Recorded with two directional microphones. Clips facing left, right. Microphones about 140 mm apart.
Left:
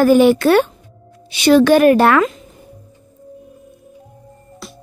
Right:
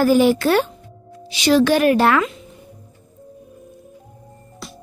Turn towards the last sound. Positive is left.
turn(degrees=0)  # may be behind; listen again after turning